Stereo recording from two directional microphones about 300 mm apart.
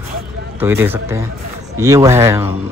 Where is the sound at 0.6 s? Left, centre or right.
Centre.